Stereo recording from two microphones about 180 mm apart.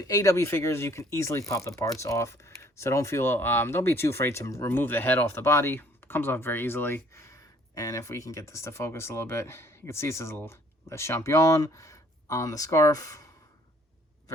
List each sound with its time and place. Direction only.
0.0 s speech: 20° left (ahead or behind)